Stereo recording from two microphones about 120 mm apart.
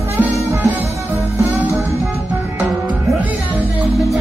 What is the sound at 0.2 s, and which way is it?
Music, 15° right (ahead or behind).